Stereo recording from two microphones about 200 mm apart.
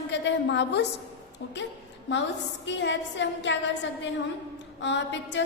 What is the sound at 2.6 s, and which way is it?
A woman's voice, 65° left (ahead or behind).